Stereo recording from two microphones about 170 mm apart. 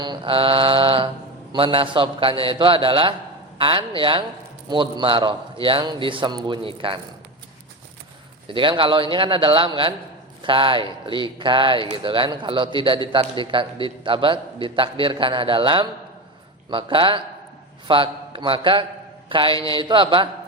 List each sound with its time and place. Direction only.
0.0 s a man's voice: 25° right (ahead or behind)
8.4 s a man's voice: 30° right (ahead or behind)